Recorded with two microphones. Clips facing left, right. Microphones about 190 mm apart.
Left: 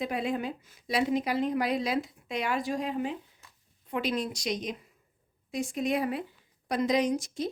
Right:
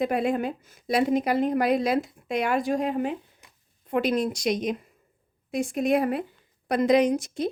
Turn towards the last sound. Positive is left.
turn(degrees=-60)  # may be behind; listen again after turning